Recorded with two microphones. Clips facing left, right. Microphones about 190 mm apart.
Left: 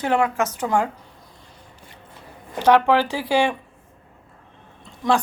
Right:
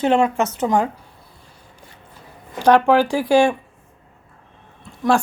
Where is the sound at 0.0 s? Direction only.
25° right (ahead or behind).